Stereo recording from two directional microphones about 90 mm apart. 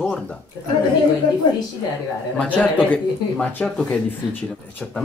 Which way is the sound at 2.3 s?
15° left (ahead or behind).